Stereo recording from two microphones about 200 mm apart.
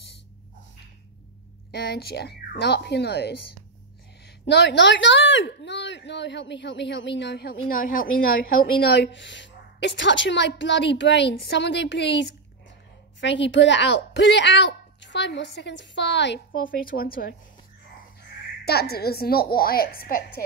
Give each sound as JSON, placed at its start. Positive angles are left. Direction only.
{"t": 1.7, "sound": "speech", "side_deg": 55}
{"t": 4.5, "sound": "speech", "side_deg": 60}
{"t": 16.8, "sound": "a woman's voice", "side_deg": 50}
{"t": 18.7, "sound": "a woman's voice", "side_deg": 50}